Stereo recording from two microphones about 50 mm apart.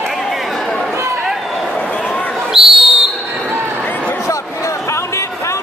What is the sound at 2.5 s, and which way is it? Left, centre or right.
Whistle, centre.